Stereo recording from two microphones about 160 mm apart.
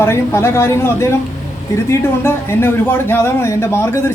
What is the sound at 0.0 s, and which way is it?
Speech, 15° left (ahead or behind).